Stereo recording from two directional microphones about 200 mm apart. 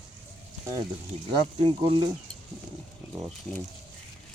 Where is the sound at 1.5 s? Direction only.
25° right (ahead or behind).